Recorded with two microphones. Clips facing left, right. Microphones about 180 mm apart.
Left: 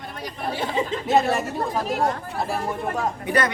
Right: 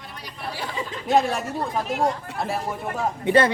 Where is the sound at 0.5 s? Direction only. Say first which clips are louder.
Left 7 dB; 25° left (ahead or behind).